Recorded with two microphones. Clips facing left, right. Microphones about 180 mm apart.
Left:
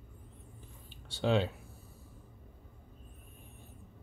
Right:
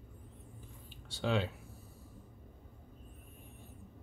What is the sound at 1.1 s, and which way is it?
Speech, 30° left (ahead or behind).